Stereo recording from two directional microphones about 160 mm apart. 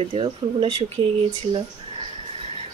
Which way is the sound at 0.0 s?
35° right (ahead or behind).